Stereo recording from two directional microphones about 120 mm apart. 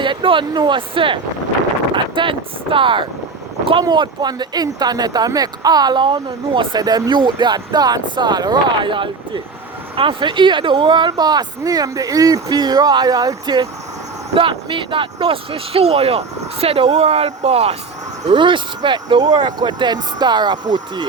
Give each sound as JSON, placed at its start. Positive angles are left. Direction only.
{"t": 0.0, "sound": "speech", "side_deg": -45}
{"t": 18.3, "sound": "speech", "side_deg": -40}